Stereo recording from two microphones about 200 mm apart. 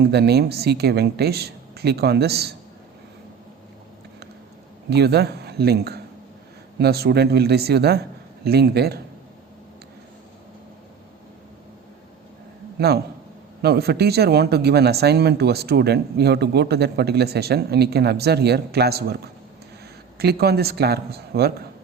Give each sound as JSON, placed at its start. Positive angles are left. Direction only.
{"t": 0.0, "sound": "speech", "side_deg": -55}
{"t": 4.9, "sound": "speech", "side_deg": -55}
{"t": 12.8, "sound": "speech", "side_deg": -55}